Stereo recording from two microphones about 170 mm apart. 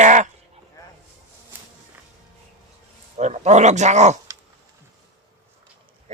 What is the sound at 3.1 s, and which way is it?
Speech, 45° right (ahead or behind).